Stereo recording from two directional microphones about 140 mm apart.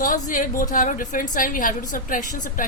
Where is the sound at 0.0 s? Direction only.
75° left (ahead or behind).